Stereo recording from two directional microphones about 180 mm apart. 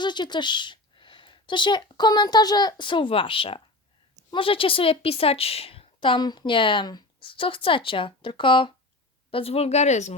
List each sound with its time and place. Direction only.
0.0 s a woman's voice: 25° left (ahead or behind)